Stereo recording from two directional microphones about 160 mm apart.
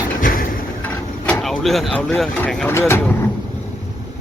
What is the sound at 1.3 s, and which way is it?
Vehicle, centre (ahead or behind).